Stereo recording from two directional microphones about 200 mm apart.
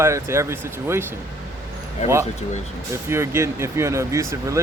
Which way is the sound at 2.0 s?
35° left (ahead or behind).